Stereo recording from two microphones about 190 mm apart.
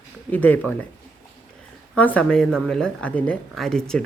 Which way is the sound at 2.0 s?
5° left (ahead or behind).